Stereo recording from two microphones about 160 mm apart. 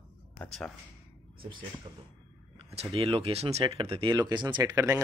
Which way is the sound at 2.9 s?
35° right (ahead or behind).